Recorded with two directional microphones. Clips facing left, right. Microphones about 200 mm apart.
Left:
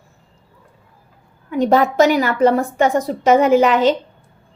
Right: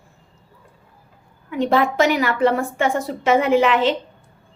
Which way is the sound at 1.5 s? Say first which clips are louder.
Left 3 dB; 40° left (ahead or behind).